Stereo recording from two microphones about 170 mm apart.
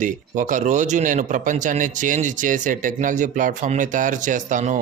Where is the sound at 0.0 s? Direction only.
50° right (ahead or behind).